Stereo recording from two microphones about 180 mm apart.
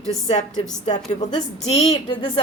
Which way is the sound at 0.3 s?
40° left (ahead or behind).